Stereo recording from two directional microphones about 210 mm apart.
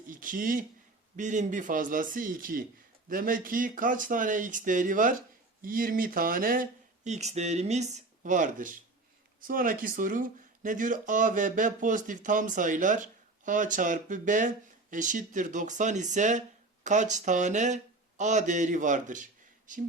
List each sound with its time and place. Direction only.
0.1 s speech: 40° right (ahead or behind)